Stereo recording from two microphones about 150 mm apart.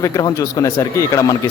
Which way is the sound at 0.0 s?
20° left (ahead or behind).